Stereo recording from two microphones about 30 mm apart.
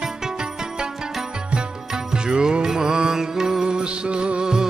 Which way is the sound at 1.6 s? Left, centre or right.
Right.